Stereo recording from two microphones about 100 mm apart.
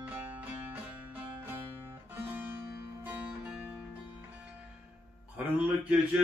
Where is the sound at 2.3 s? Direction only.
20° right (ahead or behind).